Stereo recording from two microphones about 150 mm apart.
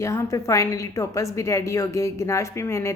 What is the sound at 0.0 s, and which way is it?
A woman's voice, 20° left (ahead or behind).